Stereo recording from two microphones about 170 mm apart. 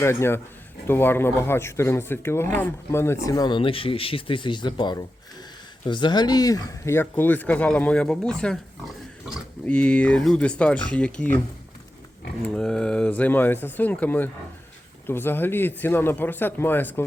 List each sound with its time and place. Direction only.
0.0 s speech: 15° left (ahead or behind)
9.6 s speech: 10° left (ahead or behind)
12.5 s speech: 5° left (ahead or behind)